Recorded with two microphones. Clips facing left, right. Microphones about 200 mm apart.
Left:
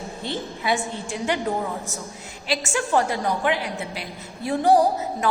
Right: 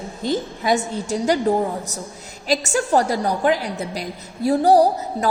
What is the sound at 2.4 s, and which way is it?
A woman's voice, 40° right (ahead or behind).